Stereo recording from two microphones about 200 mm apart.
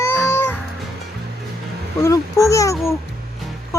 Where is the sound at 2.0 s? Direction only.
15° left (ahead or behind).